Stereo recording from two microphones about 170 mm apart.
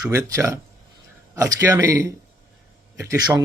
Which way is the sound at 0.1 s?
15° right (ahead or behind).